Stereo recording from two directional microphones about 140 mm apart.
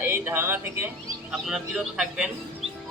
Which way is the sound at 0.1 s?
15° right (ahead or behind).